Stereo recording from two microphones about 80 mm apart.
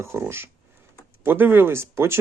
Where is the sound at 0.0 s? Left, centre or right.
Right.